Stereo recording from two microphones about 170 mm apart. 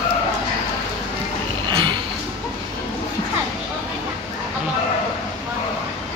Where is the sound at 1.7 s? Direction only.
30° right (ahead or behind).